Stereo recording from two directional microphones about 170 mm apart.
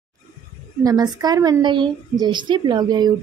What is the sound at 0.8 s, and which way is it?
A woman's voice, 25° right (ahead or behind).